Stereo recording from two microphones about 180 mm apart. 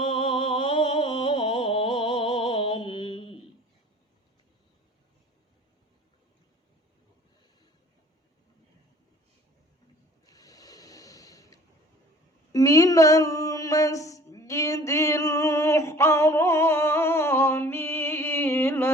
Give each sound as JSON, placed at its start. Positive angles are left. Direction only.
{"t": 0.0, "sound": "music", "side_deg": 25}
{"t": 10.2, "sound": "rub", "side_deg": 20}
{"t": 12.5, "sound": "a sound", "side_deg": 20}